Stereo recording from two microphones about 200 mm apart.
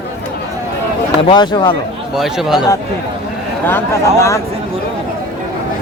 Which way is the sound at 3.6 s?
10° left (ahead or behind).